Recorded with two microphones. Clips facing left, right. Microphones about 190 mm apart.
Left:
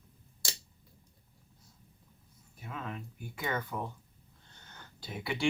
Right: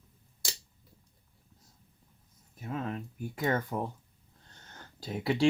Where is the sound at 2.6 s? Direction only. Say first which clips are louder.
Right 6 dB; 35° right (ahead or behind).